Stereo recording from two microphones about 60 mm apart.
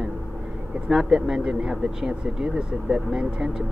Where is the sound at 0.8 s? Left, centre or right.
Centre.